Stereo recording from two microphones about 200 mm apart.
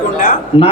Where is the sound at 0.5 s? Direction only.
30° left (ahead or behind).